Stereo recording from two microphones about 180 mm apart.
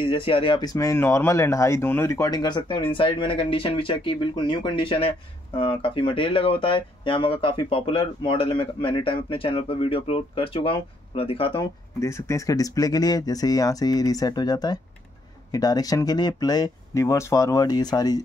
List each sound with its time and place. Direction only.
0.0 s speech: 30° left (ahead or behind)